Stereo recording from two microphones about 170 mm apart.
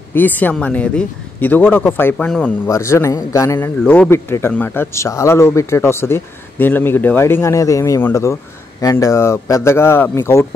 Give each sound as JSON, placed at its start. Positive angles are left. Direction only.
{"t": 0.1, "sound": "a man's voice", "side_deg": 10}
{"t": 2.7, "sound": "a man's voice", "side_deg": 15}